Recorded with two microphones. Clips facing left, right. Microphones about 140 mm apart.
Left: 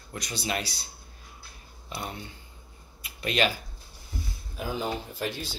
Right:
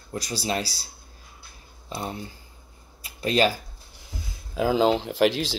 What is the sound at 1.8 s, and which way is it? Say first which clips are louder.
Speech: right 4 dB; 30° right (ahead or behind).